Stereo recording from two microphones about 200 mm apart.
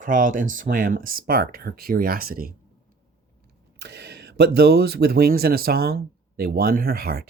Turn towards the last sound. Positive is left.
turn(degrees=-50)  # may be behind; listen again after turning